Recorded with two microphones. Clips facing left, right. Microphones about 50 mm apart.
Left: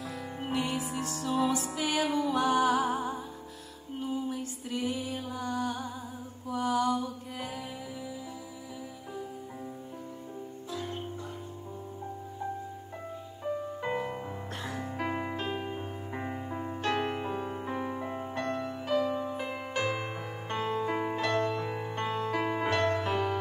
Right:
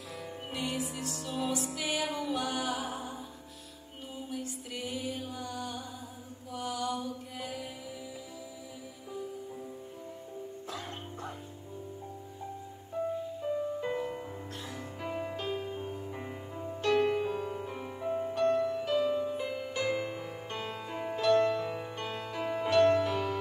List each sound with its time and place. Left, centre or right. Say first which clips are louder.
0.5 s music: left 4 dB; left
4.3 s music: left 4 dB; left
6.5 s mantra: left 7 dB; left
13.7 s music: left 1 dB; left
15.0 s music: left 3 dB; left
15.3 s music: left 1 dB; left
16.9 s music: right 6 dB; left
19.0 s music: right 1 dB; centre
20.8 s music: left 1 dB; left
21.5 s music: right 1 dB; left
21.7 s music: left 5 dB; left